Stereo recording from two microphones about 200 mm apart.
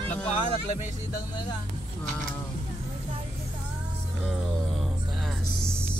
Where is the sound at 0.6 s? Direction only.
35° left (ahead or behind).